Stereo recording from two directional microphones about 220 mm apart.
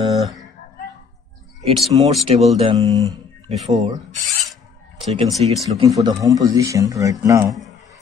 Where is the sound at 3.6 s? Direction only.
30° right (ahead or behind).